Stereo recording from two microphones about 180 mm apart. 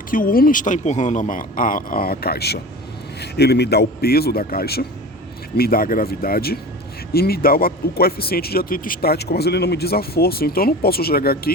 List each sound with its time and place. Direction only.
0.1 s speech: 50° left (ahead or behind)